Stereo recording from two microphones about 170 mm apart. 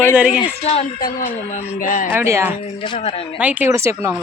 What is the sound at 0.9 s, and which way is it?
Speech, 55° left (ahead or behind).